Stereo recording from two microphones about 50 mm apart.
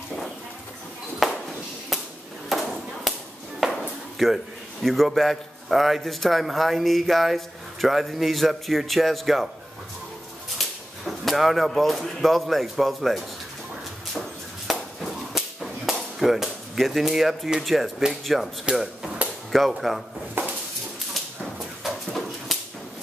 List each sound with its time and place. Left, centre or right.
1.2 s a sound: centre
2.7 s whip: centre
4.2 s a man's voice: centre
10.6 s speech: centre
14.7 s whip: centre
19.5 s a man's voice: centre
20.4 s a sound: right
21.8 s bird: centre